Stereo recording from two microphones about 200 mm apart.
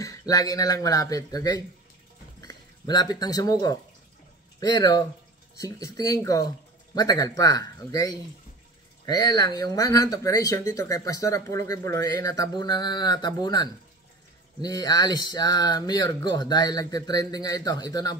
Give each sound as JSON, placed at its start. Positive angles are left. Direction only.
{"t": 0.0, "sound": "speech", "side_deg": 15}